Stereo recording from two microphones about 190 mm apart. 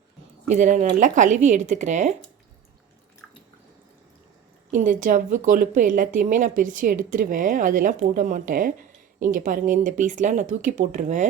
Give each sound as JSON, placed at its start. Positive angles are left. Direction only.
{"t": 0.4, "sound": "speech", "side_deg": -40}
{"t": 4.7, "sound": "a woman's voice", "side_deg": -40}